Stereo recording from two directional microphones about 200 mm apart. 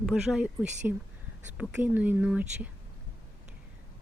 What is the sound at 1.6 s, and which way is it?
Speech, 5° right (ahead or behind).